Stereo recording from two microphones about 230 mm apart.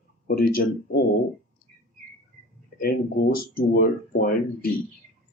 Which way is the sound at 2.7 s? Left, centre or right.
Left.